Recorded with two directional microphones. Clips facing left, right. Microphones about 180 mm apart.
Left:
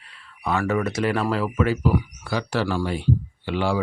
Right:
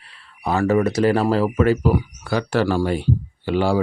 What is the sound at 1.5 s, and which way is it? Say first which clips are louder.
Speech: right 4 dB; 45° right (ahead or behind).